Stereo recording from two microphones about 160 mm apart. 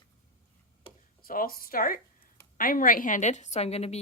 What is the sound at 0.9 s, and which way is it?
Tick-tock, 35° left (ahead or behind).